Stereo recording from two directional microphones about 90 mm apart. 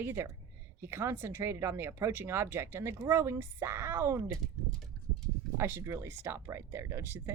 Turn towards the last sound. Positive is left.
turn(degrees=-25)  # may be behind; listen again after turning